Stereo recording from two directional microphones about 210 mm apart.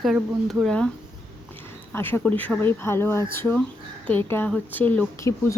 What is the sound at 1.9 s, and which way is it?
Speech, 10° left (ahead or behind).